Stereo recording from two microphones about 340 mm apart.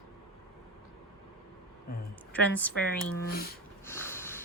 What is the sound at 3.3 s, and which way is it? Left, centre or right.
Speech, left.